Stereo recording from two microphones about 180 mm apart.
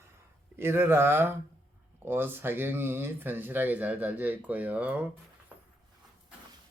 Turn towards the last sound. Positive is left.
turn(degrees=-10)  # may be behind; listen again after turning